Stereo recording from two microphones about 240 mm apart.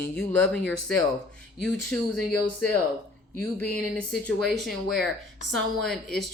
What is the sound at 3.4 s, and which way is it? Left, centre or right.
A woman's voice, centre.